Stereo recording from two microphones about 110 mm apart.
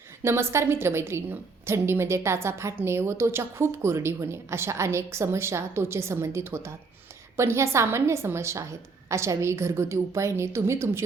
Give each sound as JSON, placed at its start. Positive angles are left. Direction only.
{"t": 0.2, "sound": "a woman's voice", "side_deg": -25}